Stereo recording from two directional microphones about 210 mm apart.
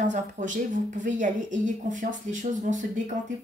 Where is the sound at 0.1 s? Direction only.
35° right (ahead or behind).